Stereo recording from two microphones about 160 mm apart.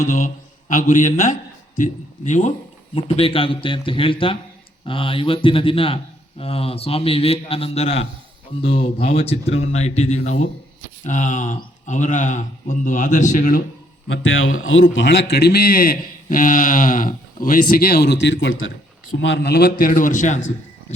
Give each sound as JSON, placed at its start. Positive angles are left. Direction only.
{"t": 0.0, "sound": "a man's voice", "side_deg": 50}
{"t": 2.9, "sound": "a man's voice", "side_deg": 35}
{"t": 9.1, "sound": "speech", "side_deg": 40}
{"t": 14.8, "sound": "a man's voice", "side_deg": 90}
{"t": 19.8, "sound": "speech", "side_deg": 55}